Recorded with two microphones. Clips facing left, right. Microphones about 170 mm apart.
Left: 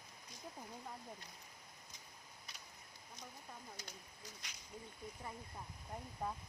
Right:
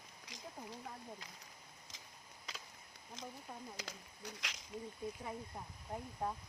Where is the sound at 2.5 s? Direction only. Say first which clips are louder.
Right 9 dB; 90° right.